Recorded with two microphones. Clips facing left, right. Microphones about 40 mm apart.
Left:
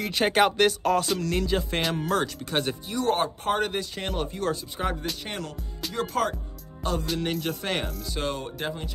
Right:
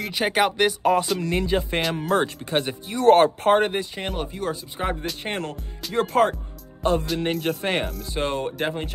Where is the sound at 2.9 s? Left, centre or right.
Right.